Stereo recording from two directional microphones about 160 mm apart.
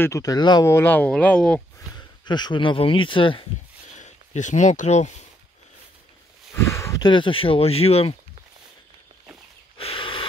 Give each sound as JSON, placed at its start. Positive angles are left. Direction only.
{"t": 0.0, "sound": "speech", "side_deg": 20}
{"t": 0.7, "sound": "speech", "side_deg": 15}
{"t": 2.0, "sound": "speech", "side_deg": 25}
{"t": 3.9, "sound": "speech", "side_deg": 45}
{"t": 6.5, "sound": "a sound", "side_deg": 15}
{"t": 7.1, "sound": "speech", "side_deg": 30}
{"t": 9.8, "sound": "snort", "side_deg": 35}